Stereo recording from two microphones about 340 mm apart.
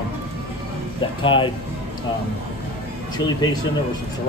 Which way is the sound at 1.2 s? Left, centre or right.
Centre.